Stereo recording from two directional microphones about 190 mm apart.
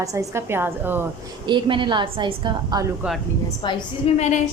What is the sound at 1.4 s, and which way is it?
A woman's voice, 25° right (ahead or behind).